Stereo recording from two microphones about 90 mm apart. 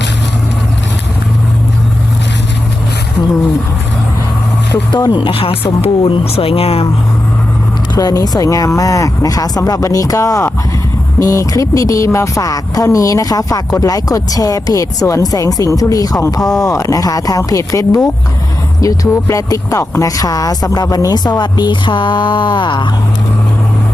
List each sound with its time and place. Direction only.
4.9 s speech: 55° left (ahead or behind); by 6.8 s 90° left
7.9 s speech: 45° left (ahead or behind)